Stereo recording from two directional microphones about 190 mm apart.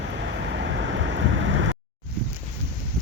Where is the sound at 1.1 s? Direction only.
75° right (ahead or behind).